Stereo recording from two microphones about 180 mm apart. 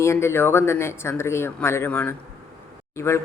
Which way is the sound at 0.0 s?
15° left (ahead or behind).